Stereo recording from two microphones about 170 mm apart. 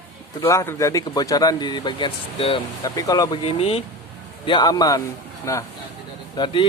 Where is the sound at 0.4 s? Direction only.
15° left (ahead or behind).